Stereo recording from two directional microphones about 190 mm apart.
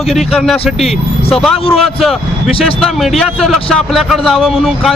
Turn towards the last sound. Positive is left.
turn(degrees=0)  # may be behind; listen again after turning